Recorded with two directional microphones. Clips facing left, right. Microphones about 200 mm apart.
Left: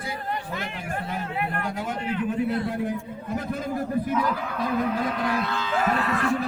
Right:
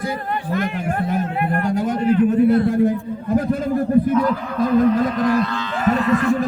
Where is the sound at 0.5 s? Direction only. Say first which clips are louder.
Right 10 dB; 55° right (ahead or behind).